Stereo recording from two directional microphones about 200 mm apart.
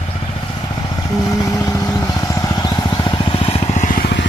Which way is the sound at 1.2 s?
15° left (ahead or behind).